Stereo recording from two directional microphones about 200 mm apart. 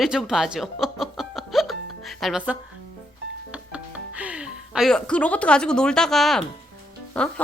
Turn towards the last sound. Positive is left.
turn(degrees=5)  # may be behind; listen again after turning